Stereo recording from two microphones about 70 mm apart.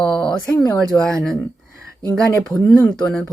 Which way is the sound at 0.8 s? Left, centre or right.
Centre.